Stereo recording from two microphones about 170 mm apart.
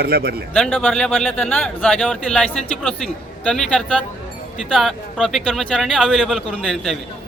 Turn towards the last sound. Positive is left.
turn(degrees=0)  # may be behind; listen again after turning